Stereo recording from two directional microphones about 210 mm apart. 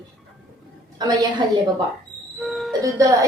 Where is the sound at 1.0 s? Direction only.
20° right (ahead or behind).